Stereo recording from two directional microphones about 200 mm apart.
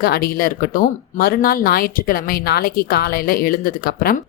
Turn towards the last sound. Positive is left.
turn(degrees=45)  # may be behind; listen again after turning